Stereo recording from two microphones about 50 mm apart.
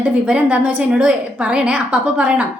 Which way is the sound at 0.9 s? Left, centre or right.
Right.